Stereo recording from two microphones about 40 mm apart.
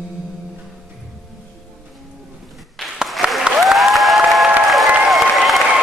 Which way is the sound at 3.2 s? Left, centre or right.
Right.